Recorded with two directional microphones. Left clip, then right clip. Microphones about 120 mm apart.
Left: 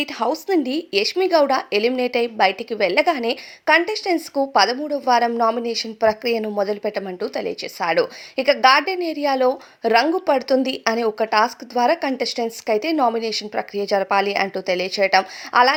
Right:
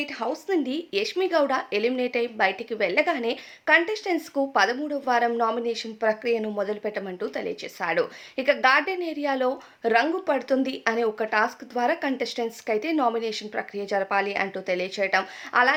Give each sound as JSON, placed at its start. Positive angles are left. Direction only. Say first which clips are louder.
{"t": 0.0, "sound": "a woman's voice", "louder": "left 7 dB", "side_deg": 80}